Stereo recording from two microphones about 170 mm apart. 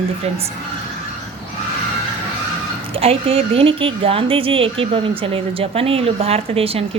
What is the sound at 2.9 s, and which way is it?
Speech, 35° right (ahead or behind).